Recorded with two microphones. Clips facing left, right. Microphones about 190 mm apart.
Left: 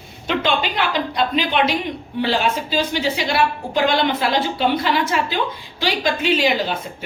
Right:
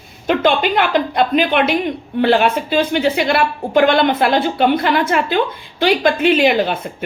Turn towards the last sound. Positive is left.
turn(degrees=-55)  # may be behind; listen again after turning